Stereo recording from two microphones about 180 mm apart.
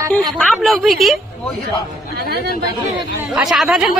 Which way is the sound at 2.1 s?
65° right (ahead or behind).